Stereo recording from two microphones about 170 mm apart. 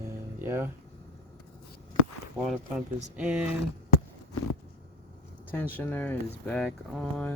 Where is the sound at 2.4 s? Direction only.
5° right (ahead or behind).